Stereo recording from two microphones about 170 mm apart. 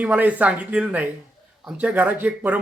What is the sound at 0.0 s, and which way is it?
Speech, 10° right (ahead or behind).